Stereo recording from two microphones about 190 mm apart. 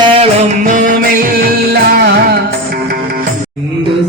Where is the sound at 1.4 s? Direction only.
55° right (ahead or behind).